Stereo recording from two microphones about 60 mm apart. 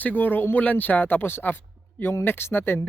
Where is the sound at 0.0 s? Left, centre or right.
Left.